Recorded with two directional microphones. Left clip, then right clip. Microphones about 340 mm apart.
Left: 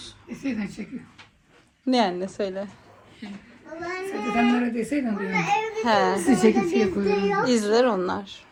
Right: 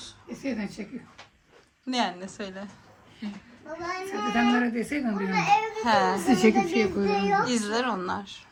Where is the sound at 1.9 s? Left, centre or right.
Centre.